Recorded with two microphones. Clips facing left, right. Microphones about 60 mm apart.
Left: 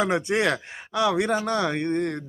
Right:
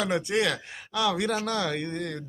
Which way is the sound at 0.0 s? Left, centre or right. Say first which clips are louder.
Left 3 dB; left.